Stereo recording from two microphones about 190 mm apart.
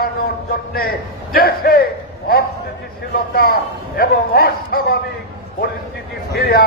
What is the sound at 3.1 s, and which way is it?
A man's voice, 55° left (ahead or behind).